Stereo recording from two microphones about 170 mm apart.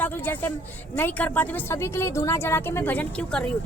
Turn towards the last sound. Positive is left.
turn(degrees=5)  # may be behind; listen again after turning